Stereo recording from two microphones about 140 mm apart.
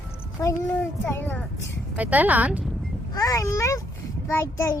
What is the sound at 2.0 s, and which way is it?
Speech, 10° right (ahead or behind).